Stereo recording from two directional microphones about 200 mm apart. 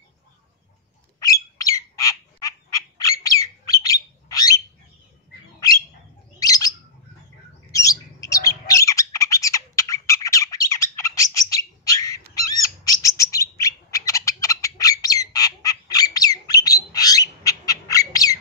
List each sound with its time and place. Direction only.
1.2 s squawk: 15° left (ahead or behind)
6.4 s bird: 15° left (ahead or behind)
7.7 s bird: 15° left (ahead or behind)